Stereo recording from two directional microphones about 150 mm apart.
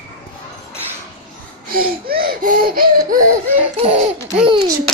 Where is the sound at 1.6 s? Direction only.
80° right.